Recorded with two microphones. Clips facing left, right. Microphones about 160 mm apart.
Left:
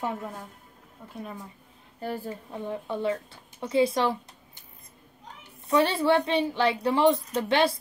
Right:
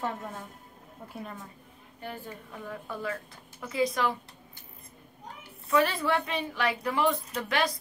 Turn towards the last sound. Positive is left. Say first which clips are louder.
# left 6 dB
turn(degrees=30)  # may be behind; listen again after turning